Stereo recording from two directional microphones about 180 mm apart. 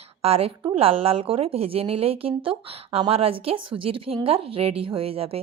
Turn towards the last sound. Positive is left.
turn(degrees=-30)  # may be behind; listen again after turning